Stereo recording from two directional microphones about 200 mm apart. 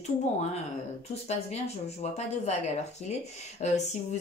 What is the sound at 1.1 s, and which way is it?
A woman's voice, 30° left (ahead or behind).